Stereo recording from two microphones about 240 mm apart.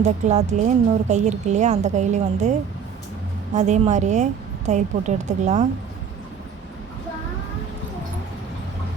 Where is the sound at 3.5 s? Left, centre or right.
Right.